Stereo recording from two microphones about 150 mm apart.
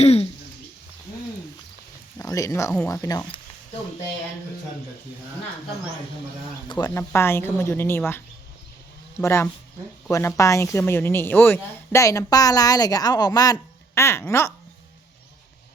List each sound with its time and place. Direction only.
0.0 s speech: 45° left (ahead or behind)
2.1 s speech: 20° left (ahead or behind)
6.7 s speech: 25° left (ahead or behind)
9.2 s speech: 15° left (ahead or behind)